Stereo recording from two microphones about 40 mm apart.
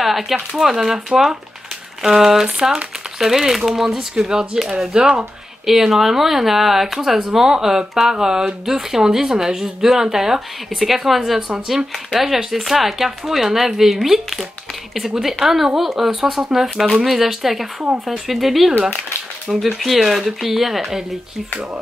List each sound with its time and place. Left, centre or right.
0.0 s speech: centre; by 5.1 s right
5.7 s speech: centre